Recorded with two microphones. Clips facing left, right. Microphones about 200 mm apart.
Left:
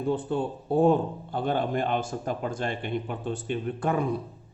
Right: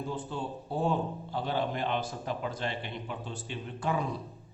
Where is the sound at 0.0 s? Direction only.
60° left (ahead or behind).